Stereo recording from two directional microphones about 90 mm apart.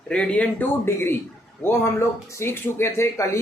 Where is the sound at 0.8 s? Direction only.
25° left (ahead or behind).